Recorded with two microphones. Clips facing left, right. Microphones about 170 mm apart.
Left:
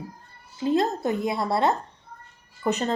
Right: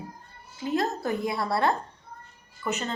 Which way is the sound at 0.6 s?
25° left (ahead or behind).